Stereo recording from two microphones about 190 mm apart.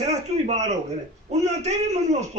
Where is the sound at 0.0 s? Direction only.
35° right (ahead or behind).